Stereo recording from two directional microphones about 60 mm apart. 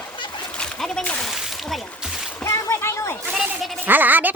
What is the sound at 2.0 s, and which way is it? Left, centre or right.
Splash, centre.